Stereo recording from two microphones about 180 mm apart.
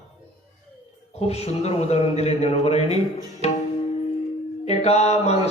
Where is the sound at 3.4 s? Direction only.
35° left (ahead or behind).